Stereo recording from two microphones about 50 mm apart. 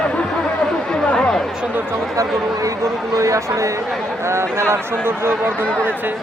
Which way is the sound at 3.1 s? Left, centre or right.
Right.